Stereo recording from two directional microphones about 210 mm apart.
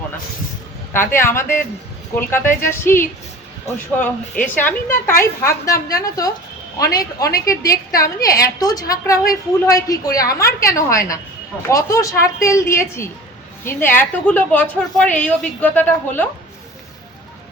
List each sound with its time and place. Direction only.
0.9 s a woman's voice: 10° left (ahead or behind)